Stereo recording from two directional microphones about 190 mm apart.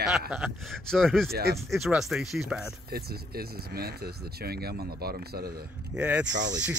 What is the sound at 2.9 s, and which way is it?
Speech, 55° right (ahead or behind).